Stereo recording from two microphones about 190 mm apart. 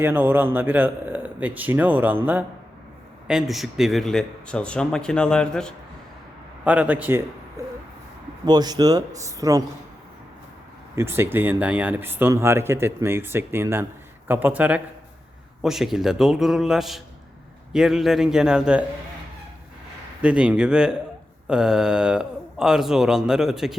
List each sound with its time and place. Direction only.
0.0 s speech: 10° right (ahead or behind); by 5.7 s 5° left (ahead or behind)
6.7 s speech: 10° right (ahead or behind)
8.4 s speech: 20° right (ahead or behind)
10.9 s speech: 10° right (ahead or behind)
20.2 s speech: 5° right (ahead or behind)